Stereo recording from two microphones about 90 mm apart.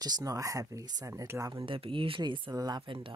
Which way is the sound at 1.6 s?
80° right.